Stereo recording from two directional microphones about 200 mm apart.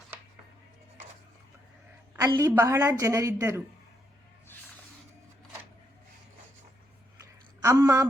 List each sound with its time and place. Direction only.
2.2 s a woman's voice: 15° right (ahead or behind)
7.6 s a woman's voice: 15° right (ahead or behind)